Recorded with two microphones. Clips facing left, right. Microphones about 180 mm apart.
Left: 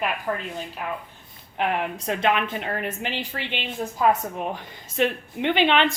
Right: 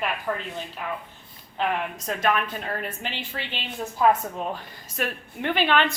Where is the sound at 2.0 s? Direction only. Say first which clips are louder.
Left 1 dB; 25° left (ahead or behind).